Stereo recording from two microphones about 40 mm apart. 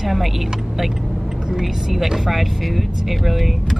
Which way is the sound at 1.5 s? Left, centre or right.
Centre.